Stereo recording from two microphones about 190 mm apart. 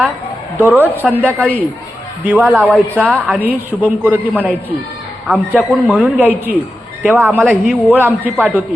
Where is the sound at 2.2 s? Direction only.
5° right (ahead or behind).